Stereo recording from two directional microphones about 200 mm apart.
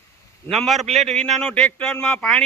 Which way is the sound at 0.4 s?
Centre (ahead or behind).